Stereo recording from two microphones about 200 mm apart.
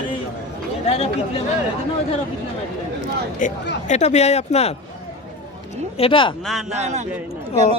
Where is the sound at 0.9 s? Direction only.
30° left (ahead or behind).